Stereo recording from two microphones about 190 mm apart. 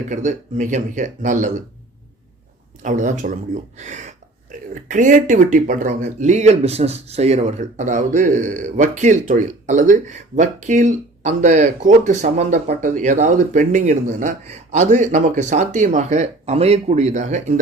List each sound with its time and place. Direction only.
0.1 s speech: 40° right (ahead or behind)
2.8 s speech: 40° right (ahead or behind)